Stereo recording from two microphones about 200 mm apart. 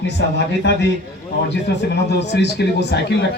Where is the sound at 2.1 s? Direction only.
60° left (ahead or behind).